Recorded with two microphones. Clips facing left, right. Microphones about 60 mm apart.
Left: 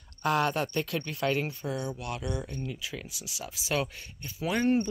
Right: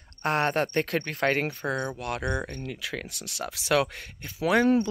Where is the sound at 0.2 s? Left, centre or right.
Right.